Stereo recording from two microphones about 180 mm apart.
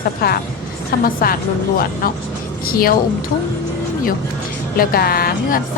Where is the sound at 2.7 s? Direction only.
55° left (ahead or behind).